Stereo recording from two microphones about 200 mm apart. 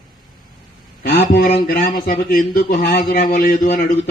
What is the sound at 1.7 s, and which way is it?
Speech, 45° left (ahead or behind).